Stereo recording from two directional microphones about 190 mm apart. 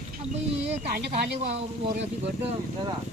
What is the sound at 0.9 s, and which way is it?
Speech, 60° right (ahead or behind).